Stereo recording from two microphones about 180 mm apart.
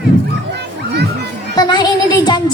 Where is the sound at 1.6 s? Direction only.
25° left (ahead or behind).